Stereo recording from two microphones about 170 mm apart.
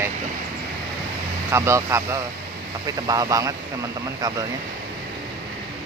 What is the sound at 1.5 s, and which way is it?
Speech, 15° right (ahead or behind).